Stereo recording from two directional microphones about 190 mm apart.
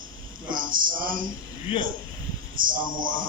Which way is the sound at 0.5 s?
45° right (ahead or behind).